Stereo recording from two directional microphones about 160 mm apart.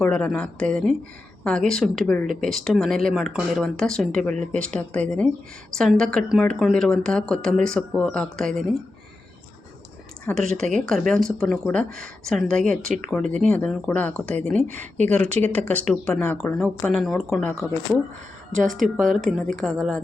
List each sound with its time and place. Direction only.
0.0 s speech: 5° left (ahead or behind)
2.2 s speech: 55° right (ahead or behind)
2.5 s speech: centre (ahead or behind)
10.2 s speech: 5° left (ahead or behind)
18.7 s speech: centre (ahead or behind)